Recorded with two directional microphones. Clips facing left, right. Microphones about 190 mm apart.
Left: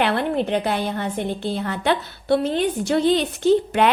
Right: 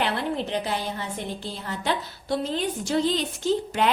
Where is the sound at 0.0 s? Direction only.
60° left (ahead or behind).